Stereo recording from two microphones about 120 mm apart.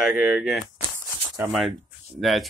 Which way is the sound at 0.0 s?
5° right (ahead or behind).